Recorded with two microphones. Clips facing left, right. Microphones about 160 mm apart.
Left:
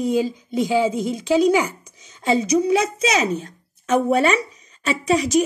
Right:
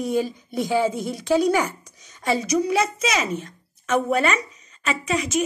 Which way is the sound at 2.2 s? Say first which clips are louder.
Left 3 dB; 30° left (ahead or behind).